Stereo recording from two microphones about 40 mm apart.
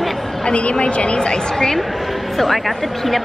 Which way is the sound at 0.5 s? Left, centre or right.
Left.